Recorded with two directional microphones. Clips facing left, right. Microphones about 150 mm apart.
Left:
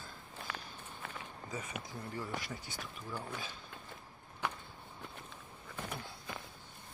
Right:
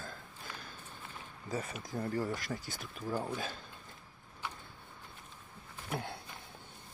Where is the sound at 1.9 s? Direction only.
45° right (ahead or behind).